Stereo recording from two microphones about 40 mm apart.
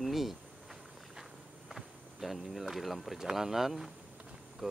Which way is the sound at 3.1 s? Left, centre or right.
Centre.